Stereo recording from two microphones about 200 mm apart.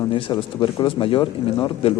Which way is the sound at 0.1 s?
25° left (ahead or behind).